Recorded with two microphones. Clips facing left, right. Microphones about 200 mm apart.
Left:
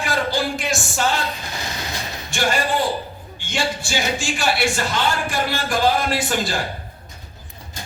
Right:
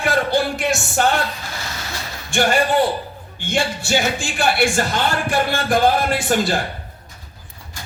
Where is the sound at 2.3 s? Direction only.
55° right (ahead or behind).